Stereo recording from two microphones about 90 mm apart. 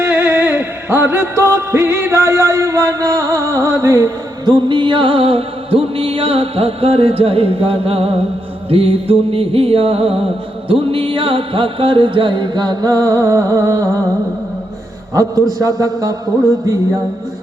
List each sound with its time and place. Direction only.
0.0 s music: 20° right (ahead or behind)
4.4 s music: 55° right (ahead or behind); by 14.0 s 40° right (ahead or behind)
15.1 s a man's voice: 40° right (ahead or behind)